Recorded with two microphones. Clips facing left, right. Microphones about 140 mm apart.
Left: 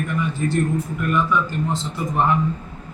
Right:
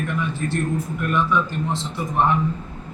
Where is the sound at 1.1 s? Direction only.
Centre (ahead or behind).